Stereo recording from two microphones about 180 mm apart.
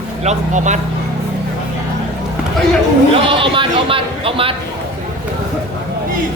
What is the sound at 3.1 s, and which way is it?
Sheep, 30° right (ahead or behind).